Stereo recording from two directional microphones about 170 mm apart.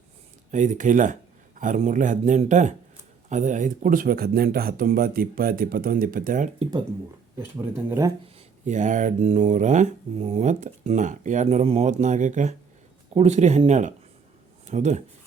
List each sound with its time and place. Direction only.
0.5 s speech: 45° right (ahead or behind)
6.6 s speech: 25° right (ahead or behind)
7.9 s speech: 15° right (ahead or behind)
8.4 s speech: 45° right (ahead or behind)